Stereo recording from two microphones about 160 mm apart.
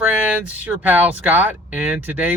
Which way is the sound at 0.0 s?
10° right (ahead or behind).